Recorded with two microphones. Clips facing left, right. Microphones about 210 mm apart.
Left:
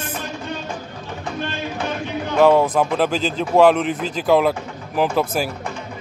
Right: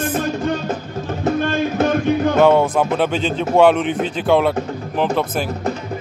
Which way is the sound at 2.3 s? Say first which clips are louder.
Left 2 dB; centre (ahead or behind).